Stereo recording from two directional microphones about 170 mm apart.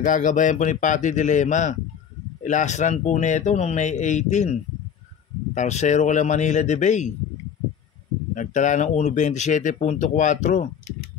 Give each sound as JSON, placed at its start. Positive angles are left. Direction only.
{"t": 0.0, "sound": "speech", "side_deg": 50}
{"t": 8.4, "sound": "speech", "side_deg": 45}